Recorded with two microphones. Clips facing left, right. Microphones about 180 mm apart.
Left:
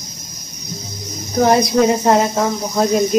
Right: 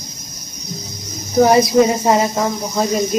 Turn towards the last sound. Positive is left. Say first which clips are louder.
# left 2 dB
turn(degrees=0)  # may be behind; listen again after turning